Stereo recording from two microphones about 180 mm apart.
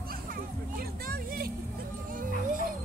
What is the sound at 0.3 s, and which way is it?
Music, 55° right (ahead or behind).